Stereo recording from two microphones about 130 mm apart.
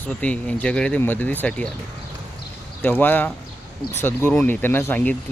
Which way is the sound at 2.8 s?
15° left (ahead or behind).